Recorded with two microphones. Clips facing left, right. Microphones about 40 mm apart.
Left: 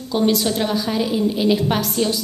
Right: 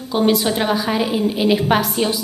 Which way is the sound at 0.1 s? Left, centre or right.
Centre.